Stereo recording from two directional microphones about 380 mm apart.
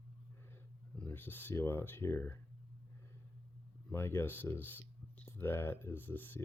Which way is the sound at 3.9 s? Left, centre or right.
Centre.